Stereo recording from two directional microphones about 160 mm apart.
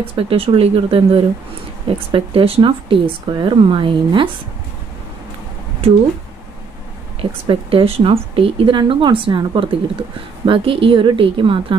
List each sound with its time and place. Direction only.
0.0 s speech: 35° right (ahead or behind)
5.8 s a woman's voice: 40° right (ahead or behind)
7.2 s speech: 35° right (ahead or behind)